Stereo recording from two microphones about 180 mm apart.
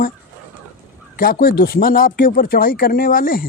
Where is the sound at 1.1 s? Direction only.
55° left (ahead or behind).